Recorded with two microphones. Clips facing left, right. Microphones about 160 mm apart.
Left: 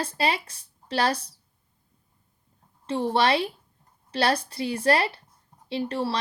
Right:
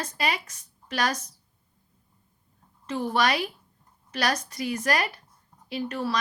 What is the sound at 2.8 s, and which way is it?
A woman's voice, 30° left (ahead or behind).